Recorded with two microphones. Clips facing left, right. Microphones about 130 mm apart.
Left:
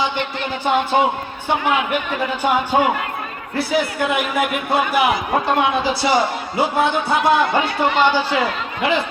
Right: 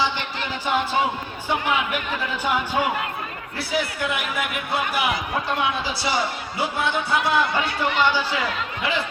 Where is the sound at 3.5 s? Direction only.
55° left (ahead or behind).